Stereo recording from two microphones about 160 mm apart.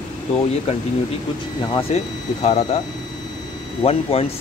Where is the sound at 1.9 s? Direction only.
45° left (ahead or behind).